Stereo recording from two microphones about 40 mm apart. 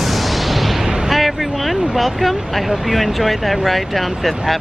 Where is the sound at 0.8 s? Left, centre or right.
Centre.